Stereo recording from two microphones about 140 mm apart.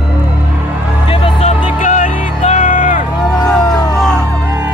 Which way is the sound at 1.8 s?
55° left (ahead or behind).